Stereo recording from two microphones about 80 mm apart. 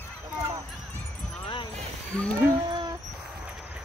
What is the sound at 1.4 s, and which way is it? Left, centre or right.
Music, left.